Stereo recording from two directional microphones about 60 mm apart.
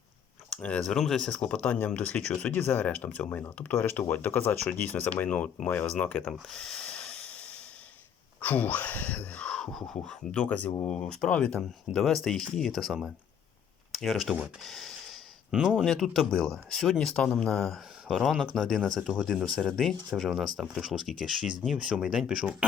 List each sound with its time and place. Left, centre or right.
0.6 s speech: left
0.9 s speech: centre; by 4.5 s left
4.6 s speech: left
6.2 s a sound: centre
8.4 s speech: left
9.5 s speech: centre
13.9 s speech: centre
14.6 s a sound: centre
15.5 s speech: centre
15.8 s speech: centre